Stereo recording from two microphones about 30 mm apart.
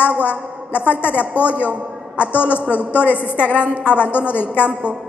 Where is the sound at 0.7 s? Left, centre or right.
Left.